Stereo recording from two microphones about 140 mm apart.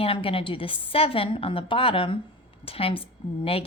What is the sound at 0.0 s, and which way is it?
A woman's voice, 40° left (ahead or behind).